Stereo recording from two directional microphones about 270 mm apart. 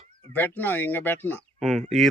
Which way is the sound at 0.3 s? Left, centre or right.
Centre.